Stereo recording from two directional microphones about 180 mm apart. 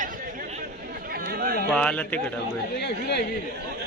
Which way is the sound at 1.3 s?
55° right (ahead or behind).